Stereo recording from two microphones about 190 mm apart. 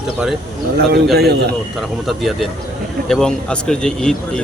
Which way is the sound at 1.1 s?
55° right (ahead or behind).